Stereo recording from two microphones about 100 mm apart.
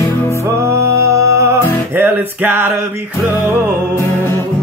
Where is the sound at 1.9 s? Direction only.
15° right (ahead or behind).